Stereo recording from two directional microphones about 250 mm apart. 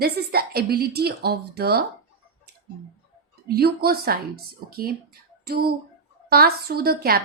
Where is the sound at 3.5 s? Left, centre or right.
Right.